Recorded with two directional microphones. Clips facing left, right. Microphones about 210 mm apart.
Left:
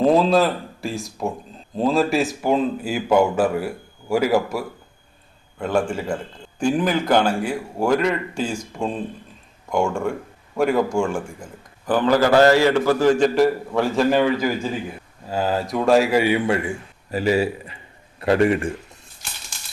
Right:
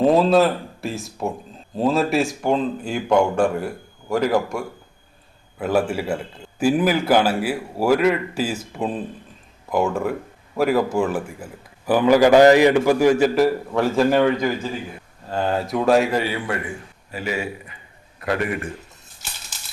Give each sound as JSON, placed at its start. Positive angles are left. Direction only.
{"t": 0.0, "sound": "speech", "side_deg": 0}
{"t": 5.5, "sound": "a man's voice", "side_deg": -5}
{"t": 17.1, "sound": "a man's voice", "side_deg": 35}